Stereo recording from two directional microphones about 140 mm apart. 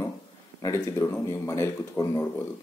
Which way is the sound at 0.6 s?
20° left (ahead or behind).